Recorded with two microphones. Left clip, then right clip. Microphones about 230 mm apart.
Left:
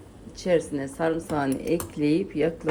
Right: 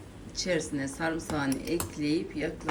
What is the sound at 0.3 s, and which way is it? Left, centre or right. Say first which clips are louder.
A woman's voice: left 6 dB; centre.